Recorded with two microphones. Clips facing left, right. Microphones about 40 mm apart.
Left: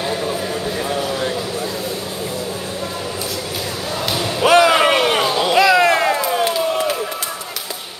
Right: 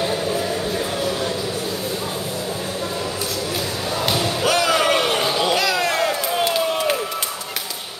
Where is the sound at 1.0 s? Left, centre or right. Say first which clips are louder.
Left 1 dB; left.